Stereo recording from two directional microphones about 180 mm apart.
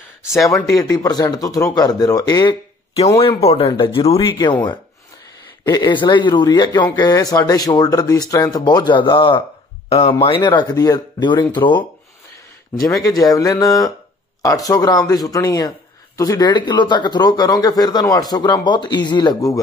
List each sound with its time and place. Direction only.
0.5 s speech: 20° left (ahead or behind)
3.2 s speech: 30° left (ahead or behind)
5.7 s speech: 25° left (ahead or behind)
12.8 s speech: 20° left (ahead or behind)